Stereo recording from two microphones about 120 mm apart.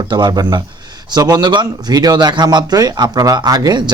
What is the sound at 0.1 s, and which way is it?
Speech, 35° right (ahead or behind).